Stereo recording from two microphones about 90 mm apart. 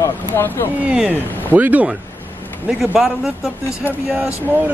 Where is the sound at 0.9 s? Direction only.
15° right (ahead or behind).